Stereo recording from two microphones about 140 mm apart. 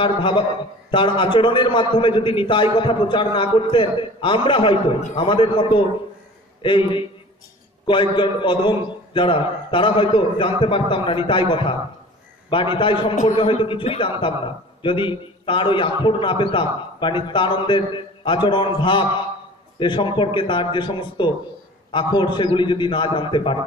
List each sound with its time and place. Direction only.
0.0 s a man's voice: 35° left (ahead or behind)